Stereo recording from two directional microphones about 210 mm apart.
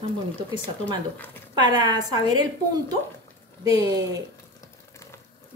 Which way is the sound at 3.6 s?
15° right (ahead or behind).